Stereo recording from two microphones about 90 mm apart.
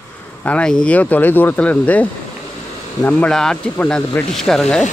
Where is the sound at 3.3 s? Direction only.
5° left (ahead or behind).